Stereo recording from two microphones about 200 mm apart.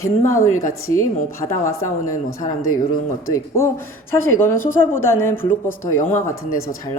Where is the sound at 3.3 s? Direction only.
15° left (ahead or behind).